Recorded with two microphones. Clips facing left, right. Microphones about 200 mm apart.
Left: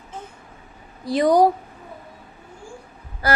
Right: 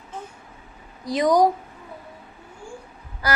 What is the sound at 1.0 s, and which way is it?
Speech, 30° left (ahead or behind).